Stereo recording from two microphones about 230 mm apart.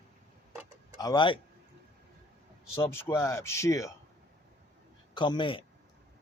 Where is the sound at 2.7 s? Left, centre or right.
Centre.